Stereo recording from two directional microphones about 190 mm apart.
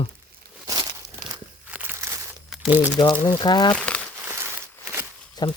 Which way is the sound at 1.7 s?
10° right (ahead or behind).